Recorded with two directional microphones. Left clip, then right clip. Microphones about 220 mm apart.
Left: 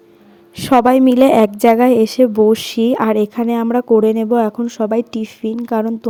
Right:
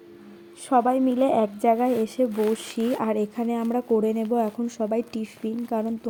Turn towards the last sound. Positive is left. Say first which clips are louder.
# left 9 dB
turn(degrees=35)  # may be behind; listen again after turning